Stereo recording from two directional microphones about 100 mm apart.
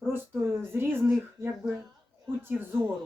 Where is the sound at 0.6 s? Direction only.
25° right (ahead or behind).